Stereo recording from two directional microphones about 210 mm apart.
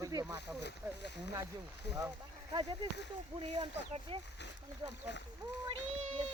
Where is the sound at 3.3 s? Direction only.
30° right (ahead or behind).